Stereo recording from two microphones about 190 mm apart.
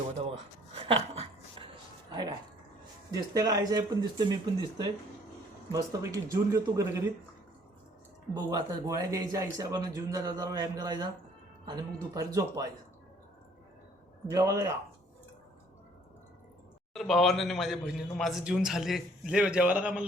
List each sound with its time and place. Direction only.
0.8 s a sound: 30° right (ahead or behind)
3.1 s speech: 20° right (ahead or behind)
8.3 s speech: 20° right (ahead or behind)
14.3 s speech: 20° right (ahead or behind)
16.9 s a man's voice: centre (ahead or behind)